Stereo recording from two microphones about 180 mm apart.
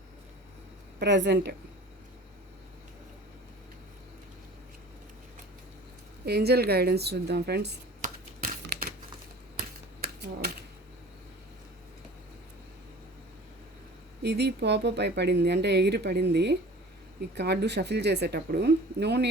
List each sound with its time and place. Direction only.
0.9 s speech: 75° right (ahead or behind)
6.2 s a woman's voice: 65° right (ahead or behind)
8.0 s computer keyboard: 60° right (ahead or behind)
9.6 s typewriter: 60° right (ahead or behind)
14.2 s speech: 65° right (ahead or behind)